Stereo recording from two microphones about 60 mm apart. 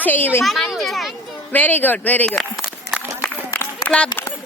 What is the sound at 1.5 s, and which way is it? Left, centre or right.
Speech, left.